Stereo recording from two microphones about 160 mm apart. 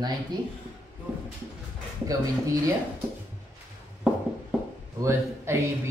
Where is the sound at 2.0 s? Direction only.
20° right (ahead or behind).